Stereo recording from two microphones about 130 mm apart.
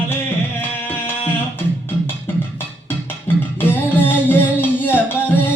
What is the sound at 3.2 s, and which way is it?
Music, 15° left (ahead or behind).